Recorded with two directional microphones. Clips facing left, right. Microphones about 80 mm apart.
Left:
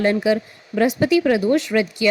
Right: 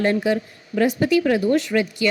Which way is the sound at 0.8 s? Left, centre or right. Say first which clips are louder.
Left 1 dB; left.